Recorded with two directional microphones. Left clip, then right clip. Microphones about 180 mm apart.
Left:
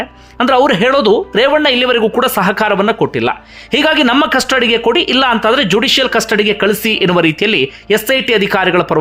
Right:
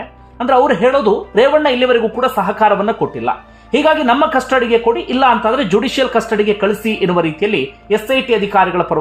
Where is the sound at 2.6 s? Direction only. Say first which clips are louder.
Even; 15° left (ahead or behind).